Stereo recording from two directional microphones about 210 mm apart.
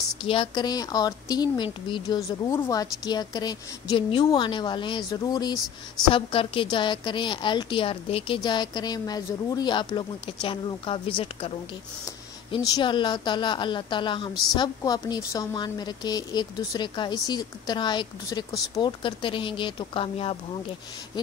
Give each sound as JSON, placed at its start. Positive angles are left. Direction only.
{"t": 0.2, "sound": "a woman's voice", "side_deg": 25}